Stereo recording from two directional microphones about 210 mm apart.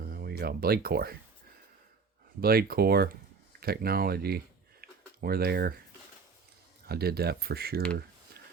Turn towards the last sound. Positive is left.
turn(degrees=-50)  # may be behind; listen again after turning